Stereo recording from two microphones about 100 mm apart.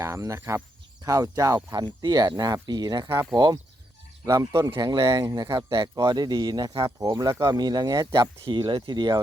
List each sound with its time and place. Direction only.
0.0 s speech: 30° right (ahead or behind); by 3.6 s 45° right (ahead or behind)
4.3 s speech: 35° right (ahead or behind)